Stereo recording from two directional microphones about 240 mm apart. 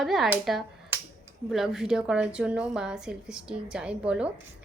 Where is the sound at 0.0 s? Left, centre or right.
Centre.